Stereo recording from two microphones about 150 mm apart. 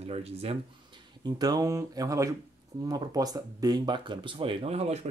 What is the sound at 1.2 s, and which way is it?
Speech, 25° right (ahead or behind).